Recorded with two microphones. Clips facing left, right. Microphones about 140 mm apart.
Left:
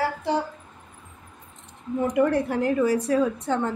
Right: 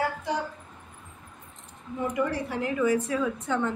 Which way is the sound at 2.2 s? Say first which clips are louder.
Left 8 dB; 50° left (ahead or behind).